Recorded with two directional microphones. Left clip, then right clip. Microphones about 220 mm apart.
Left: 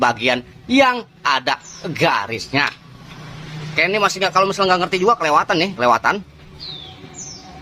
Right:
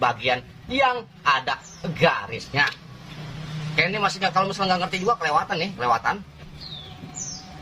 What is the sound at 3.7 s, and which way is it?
Speech, 50° left (ahead or behind).